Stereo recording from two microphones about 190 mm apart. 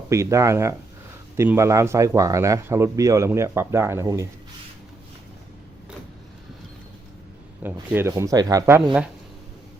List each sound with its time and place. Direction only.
0.1 s a man's voice: 15° right (ahead or behind)
7.6 s a man's voice: 15° right (ahead or behind)